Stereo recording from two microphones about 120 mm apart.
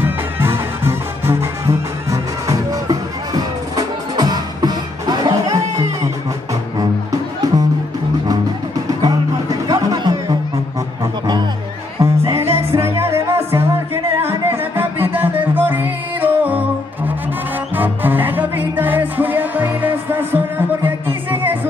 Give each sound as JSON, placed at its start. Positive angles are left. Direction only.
{"t": 0.0, "sound": "music", "side_deg": -20}
{"t": 6.8, "sound": "music", "side_deg": -30}
{"t": 9.7, "sound": "music", "side_deg": -30}
{"t": 12.0, "sound": "music", "side_deg": -20}
{"t": 17.7, "sound": "music", "side_deg": -15}